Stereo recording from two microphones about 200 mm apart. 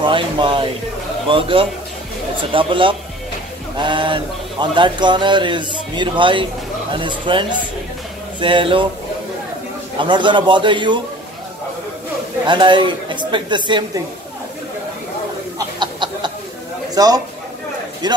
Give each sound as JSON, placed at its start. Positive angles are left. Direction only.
{"t": 0.0, "sound": "speech", "side_deg": -25}
{"t": 9.9, "sound": "speech", "side_deg": -25}
{"t": 12.4, "sound": "speech", "side_deg": -25}
{"t": 15.8, "sound": "chicken", "side_deg": -20}
{"t": 16.9, "sound": "a man's voice", "side_deg": -20}